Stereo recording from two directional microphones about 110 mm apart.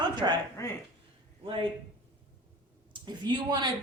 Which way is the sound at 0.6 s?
30° left (ahead or behind).